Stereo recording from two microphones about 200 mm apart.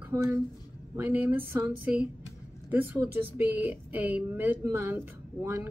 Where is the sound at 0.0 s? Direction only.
15° right (ahead or behind).